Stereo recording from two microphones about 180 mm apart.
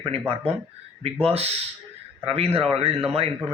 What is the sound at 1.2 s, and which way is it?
Speech, 35° right (ahead or behind).